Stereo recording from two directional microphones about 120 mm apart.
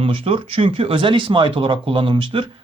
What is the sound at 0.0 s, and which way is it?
Speech, 50° right (ahead or behind).